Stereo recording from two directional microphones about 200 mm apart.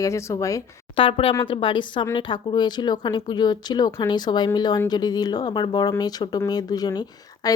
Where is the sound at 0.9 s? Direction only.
25° left (ahead or behind).